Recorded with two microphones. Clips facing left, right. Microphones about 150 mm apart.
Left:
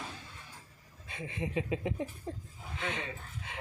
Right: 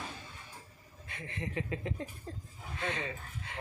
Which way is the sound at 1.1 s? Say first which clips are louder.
Left 3 dB; 15° left (ahead or behind).